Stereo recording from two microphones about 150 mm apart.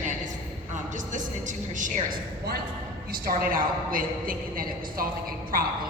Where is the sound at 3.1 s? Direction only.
70° right (ahead or behind).